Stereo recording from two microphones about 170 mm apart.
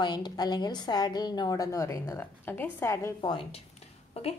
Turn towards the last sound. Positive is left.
turn(degrees=35)  # may be behind; listen again after turning